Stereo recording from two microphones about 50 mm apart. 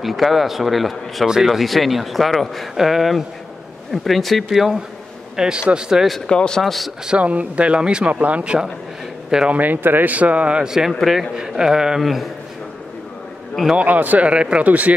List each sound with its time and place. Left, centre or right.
0.0 s speech: centre
2.7 s speech: centre
6.0 s speech: centre
6.3 s speech: centre
6.6 s speech: centre
7.1 s speech: right
10.6 s speech: centre
10.9 s speech: centre
11.3 s speech: centre
13.7 s speech: right